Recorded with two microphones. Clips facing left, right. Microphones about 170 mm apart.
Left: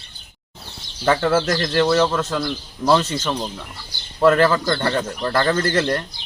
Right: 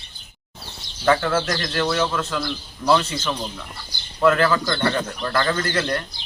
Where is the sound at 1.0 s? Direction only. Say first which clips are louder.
Left 2 dB; 30° left (ahead or behind).